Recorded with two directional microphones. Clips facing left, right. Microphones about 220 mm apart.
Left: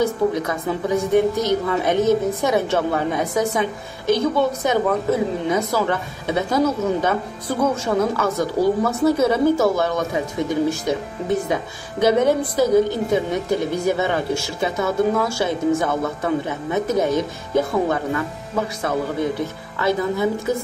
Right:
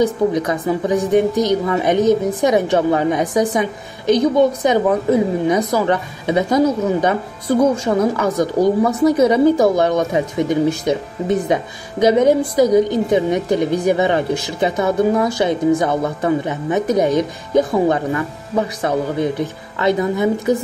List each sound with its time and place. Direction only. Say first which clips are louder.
0.0 s a woman's voice: right 3 dB; 15° right (ahead or behind)
19.8 s a woman's voice: right 3 dB; 20° right (ahead or behind)